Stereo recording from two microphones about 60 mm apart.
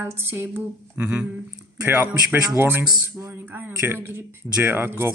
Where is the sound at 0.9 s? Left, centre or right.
Right.